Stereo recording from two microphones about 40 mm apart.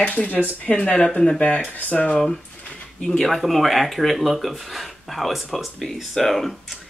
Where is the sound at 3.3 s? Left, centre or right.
Centre.